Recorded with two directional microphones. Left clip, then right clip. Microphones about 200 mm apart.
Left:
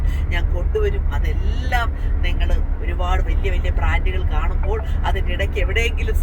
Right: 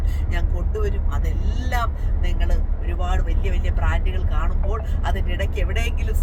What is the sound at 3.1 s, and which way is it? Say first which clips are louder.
Speech: left 6 dB; 20° right (ahead or behind).